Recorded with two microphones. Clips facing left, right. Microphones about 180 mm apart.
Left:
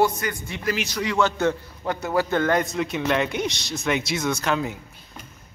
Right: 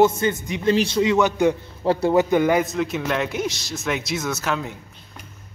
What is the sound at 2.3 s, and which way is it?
A man's voice, 10° right (ahead or behind).